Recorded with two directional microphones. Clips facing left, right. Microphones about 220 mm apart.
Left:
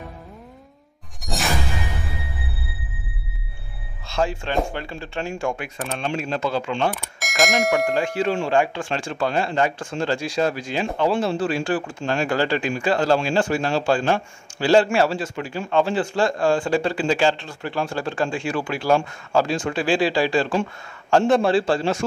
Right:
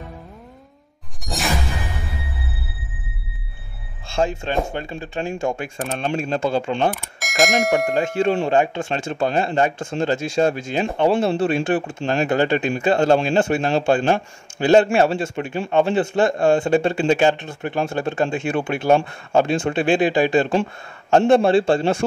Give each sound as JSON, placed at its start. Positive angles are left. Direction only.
{"t": 1.2, "sound": "music", "side_deg": 0}
{"t": 4.1, "sound": "speech", "side_deg": -25}
{"t": 5.6, "sound": "speech", "side_deg": -40}
{"t": 6.6, "sound": "speech", "side_deg": -35}
{"t": 6.9, "sound": "bell", "side_deg": 0}
{"t": 7.9, "sound": "speech", "side_deg": -20}